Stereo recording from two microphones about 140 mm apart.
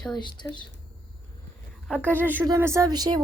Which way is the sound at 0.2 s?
35° left (ahead or behind).